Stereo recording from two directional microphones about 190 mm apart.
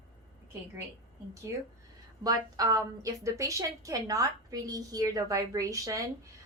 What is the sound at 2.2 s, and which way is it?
A woman's voice, 20° right (ahead or behind).